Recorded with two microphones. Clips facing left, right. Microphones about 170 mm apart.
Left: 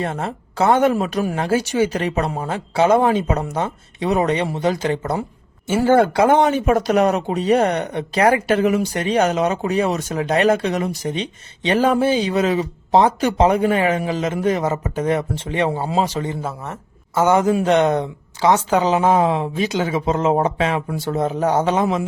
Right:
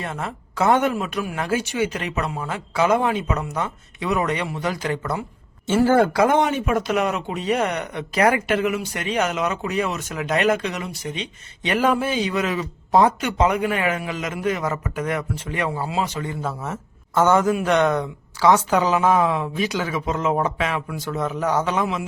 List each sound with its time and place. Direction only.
0.0 s speech: 30° left (ahead or behind)
16.4 s speech: 5° left (ahead or behind)
17.2 s a man's voice: 15° left (ahead or behind); by 22.0 s 35° left (ahead or behind)